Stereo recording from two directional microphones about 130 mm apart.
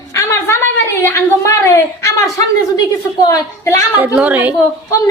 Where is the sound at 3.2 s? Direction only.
30° left (ahead or behind).